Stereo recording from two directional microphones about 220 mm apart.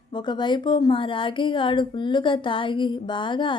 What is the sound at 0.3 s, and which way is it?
A woman's voice, 20° left (ahead or behind).